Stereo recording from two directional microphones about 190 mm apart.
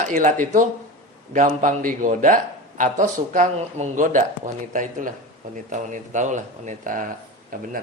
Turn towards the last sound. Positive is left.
turn(degrees=-45)  # may be behind; listen again after turning